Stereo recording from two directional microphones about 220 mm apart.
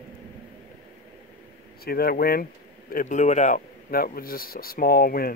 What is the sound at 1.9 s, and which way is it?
Speech, 45° left (ahead or behind).